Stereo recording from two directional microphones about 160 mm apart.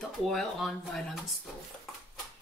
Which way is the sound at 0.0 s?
Centre (ahead or behind).